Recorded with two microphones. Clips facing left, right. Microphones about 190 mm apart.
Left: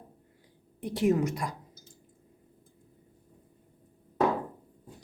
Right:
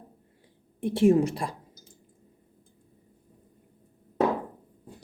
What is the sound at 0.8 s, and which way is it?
Speech, 25° right (ahead or behind).